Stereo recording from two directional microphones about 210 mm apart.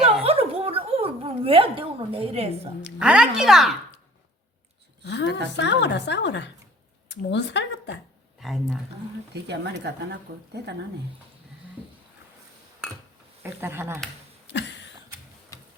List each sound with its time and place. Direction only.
0.0 s a sound: 25° right (ahead or behind)
3.0 s speech: 5° right (ahead or behind)
5.0 s speech: 55° left (ahead or behind)
8.4 s speech: centre (ahead or behind)
9.3 s a woman's voice: 55° right (ahead or behind)
13.4 s speech: 10° right (ahead or behind)
15.5 s tick-tock: 15° left (ahead or behind)